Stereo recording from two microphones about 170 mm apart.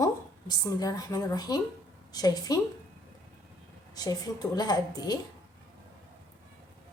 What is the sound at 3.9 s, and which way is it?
A woman's voice, 25° left (ahead or behind).